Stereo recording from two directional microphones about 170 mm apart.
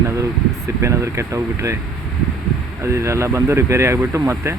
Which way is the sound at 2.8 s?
15° right (ahead or behind).